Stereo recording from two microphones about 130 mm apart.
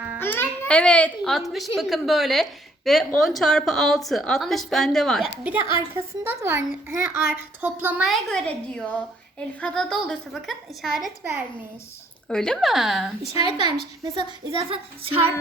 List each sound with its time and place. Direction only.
0.2 s a child's voice: 15° left (ahead or behind)
5.4 s a child's voice: 10° right (ahead or behind)
8.0 s a woman's voice: 5° left (ahead or behind)
12.3 s a woman's voice: 5° left (ahead or behind)
13.4 s a woman's voice: 35° right (ahead or behind)
14.7 s a sound: 45° right (ahead or behind)